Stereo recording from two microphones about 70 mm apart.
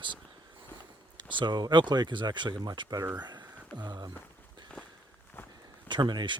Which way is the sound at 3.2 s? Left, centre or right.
Right.